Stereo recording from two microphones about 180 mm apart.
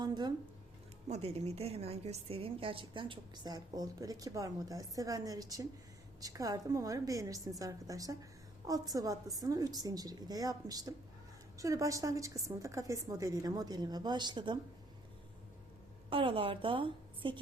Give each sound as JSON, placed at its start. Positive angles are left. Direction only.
{"t": 0.0, "sound": "speech", "side_deg": -25}
{"t": 1.0, "sound": "a woman's voice", "side_deg": -35}
{"t": 16.0, "sound": "a woman's voice", "side_deg": -30}